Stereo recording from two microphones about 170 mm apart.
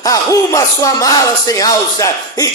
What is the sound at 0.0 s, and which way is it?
Speech, 20° left (ahead or behind).